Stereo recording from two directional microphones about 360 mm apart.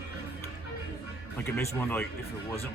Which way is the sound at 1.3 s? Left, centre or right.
Centre.